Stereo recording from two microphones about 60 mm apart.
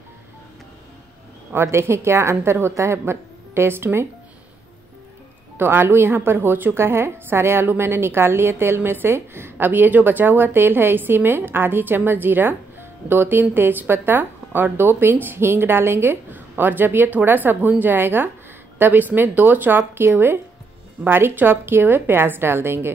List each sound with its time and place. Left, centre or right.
1.5 s a woman's voice: right
5.6 s a woman's voice: right